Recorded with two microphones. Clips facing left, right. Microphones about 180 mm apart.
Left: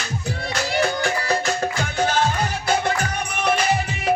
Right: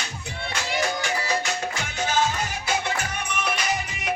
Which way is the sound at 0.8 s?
55° left (ahead or behind).